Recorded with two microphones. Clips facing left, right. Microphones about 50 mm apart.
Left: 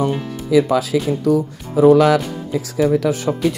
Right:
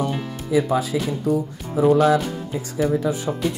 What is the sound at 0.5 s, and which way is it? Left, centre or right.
Speech, left.